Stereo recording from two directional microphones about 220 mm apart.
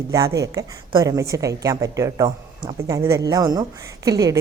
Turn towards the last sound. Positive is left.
turn(degrees=-15)  # may be behind; listen again after turning